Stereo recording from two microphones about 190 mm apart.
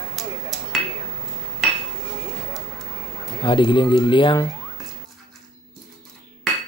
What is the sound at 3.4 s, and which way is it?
Speech, 25° left (ahead or behind).